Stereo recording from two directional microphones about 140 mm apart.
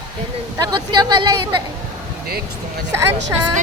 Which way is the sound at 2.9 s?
15° right (ahead or behind).